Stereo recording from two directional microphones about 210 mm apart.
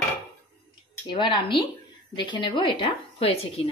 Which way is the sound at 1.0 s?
20° left (ahead or behind).